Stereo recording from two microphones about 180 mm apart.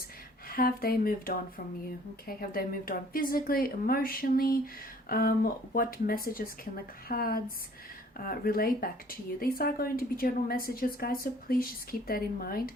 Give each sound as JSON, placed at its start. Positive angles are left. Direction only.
{"t": 0.4, "sound": "a woman's voice", "side_deg": 55}